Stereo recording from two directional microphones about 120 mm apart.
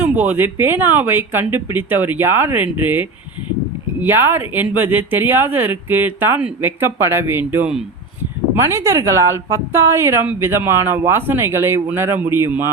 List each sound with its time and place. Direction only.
0.0 s speech: 15° right (ahead or behind)
8.7 s a woman's voice: 25° right (ahead or behind)